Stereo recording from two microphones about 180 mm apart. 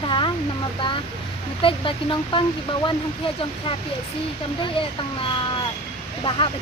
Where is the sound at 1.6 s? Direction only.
30° left (ahead or behind).